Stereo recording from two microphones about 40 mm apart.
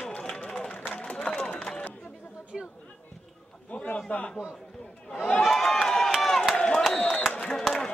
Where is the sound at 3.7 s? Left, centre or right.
Left.